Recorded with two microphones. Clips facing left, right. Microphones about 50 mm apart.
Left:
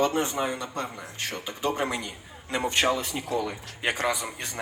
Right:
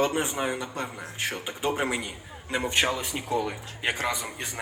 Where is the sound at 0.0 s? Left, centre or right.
Centre.